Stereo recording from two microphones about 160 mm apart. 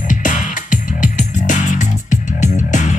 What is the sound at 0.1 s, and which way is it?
Music, 55° left (ahead or behind).